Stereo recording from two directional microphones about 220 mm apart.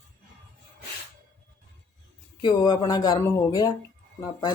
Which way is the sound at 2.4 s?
20° left (ahead or behind).